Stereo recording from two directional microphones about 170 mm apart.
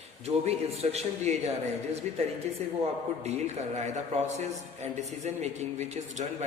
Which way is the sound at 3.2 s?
40° right (ahead or behind).